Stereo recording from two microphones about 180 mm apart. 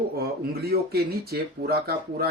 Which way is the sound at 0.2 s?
60° right (ahead or behind).